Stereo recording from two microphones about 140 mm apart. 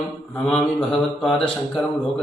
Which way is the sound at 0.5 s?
5° left (ahead or behind).